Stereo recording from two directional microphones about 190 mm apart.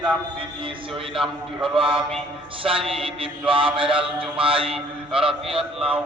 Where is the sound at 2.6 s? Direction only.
30° right (ahead or behind).